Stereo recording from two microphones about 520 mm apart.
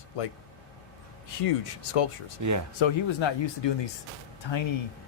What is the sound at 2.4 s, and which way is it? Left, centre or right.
Speech, right.